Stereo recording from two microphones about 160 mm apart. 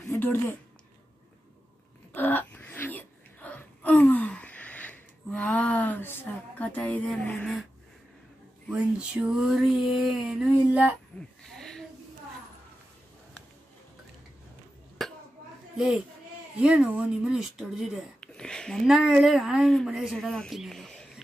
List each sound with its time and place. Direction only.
0.1 s speech: 15° left (ahead or behind)
2.1 s wail: 10° left (ahead or behind)
8.7 s speech: 5° right (ahead or behind)
11.4 s a sound: 5° left (ahead or behind)
15.0 s a sound: centre (ahead or behind)
15.7 s a child's voice: 5° right (ahead or behind)